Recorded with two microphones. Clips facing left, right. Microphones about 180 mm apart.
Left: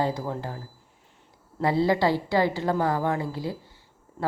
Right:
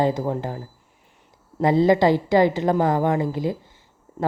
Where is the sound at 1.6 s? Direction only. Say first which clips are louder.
Right 6 dB; 20° right (ahead or behind).